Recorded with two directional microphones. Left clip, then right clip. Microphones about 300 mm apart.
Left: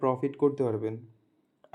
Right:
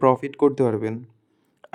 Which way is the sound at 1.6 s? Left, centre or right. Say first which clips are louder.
Right 11 dB; right.